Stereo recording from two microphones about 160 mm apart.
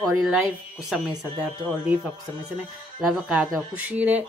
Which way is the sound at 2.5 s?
5° right (ahead or behind).